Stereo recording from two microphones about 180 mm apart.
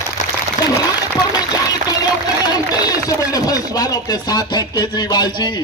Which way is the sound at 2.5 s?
20° left (ahead or behind).